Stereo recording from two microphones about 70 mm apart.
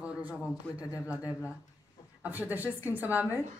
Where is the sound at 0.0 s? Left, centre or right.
Centre.